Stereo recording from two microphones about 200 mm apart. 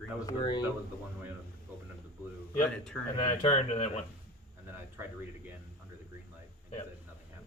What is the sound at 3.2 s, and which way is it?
Speech, 30° left (ahead or behind).